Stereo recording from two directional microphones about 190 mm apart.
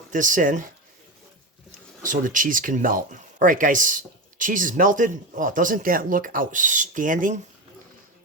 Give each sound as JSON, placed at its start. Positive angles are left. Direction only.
{"t": 0.1, "sound": "speech", "side_deg": -45}
{"t": 2.0, "sound": "speech", "side_deg": -45}